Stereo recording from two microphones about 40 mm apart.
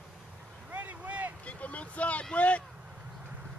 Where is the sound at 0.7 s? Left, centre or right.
Right.